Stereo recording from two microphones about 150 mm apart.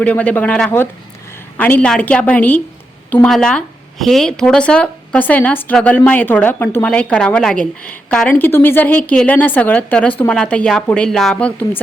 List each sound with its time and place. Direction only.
0.0 s a woman's voice: 10° left (ahead or behind)